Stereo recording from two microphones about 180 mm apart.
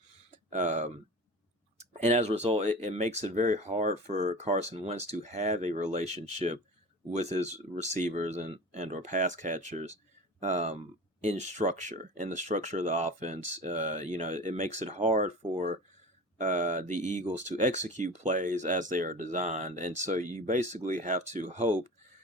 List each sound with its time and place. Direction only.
0.5 s speech: 45° right (ahead or behind)